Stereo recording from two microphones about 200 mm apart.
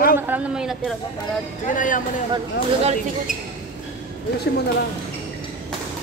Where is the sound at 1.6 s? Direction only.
40° left (ahead or behind).